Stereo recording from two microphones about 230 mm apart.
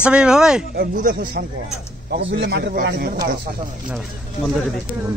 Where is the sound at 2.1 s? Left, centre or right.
Right.